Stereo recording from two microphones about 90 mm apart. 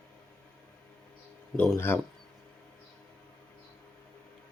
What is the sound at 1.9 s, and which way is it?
Speech, 20° left (ahead or behind).